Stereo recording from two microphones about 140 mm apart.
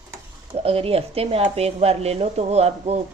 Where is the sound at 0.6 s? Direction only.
45° right (ahead or behind).